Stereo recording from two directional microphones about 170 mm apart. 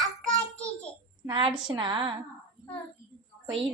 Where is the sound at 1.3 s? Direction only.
30° right (ahead or behind).